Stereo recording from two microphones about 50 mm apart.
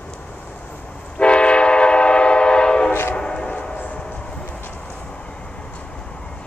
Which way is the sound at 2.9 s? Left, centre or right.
Left.